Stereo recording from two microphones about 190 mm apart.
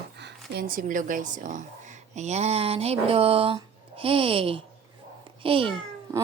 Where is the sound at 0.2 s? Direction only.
60° right (ahead or behind).